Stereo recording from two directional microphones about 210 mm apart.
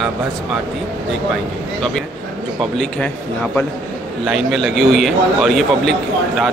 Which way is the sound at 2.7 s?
5° left (ahead or behind).